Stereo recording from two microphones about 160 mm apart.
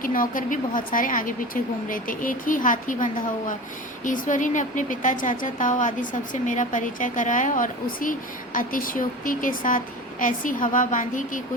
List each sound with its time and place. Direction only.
0.0 s a woman's voice: 60° left (ahead or behind)